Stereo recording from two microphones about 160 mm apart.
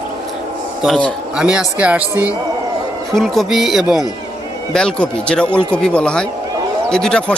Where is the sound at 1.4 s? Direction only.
5° right (ahead or behind).